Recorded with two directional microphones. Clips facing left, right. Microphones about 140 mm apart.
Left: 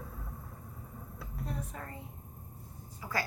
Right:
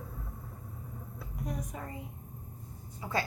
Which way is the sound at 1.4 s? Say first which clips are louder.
Right 2 dB; 15° right (ahead or behind).